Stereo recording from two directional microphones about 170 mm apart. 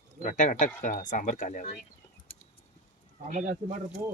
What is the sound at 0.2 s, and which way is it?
Speech, 50° left (ahead or behind).